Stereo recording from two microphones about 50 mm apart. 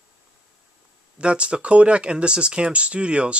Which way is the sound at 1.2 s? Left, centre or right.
Right.